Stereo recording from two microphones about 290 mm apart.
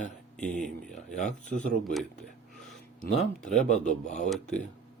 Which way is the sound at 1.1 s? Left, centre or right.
Left.